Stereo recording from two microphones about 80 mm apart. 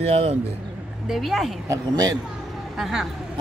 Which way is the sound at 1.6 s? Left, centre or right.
Right.